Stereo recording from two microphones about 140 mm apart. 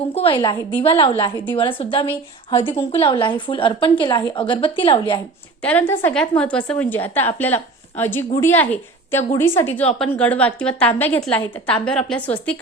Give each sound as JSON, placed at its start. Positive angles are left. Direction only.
{"t": 0.1, "sound": "a woman's voice", "side_deg": 45}
{"t": 5.6, "sound": "a woman's voice", "side_deg": 10}